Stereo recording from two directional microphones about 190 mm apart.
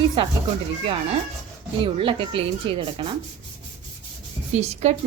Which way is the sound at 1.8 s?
25° right (ahead or behind).